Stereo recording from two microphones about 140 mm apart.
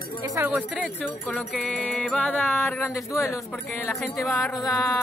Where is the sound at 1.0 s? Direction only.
10° left (ahead or behind).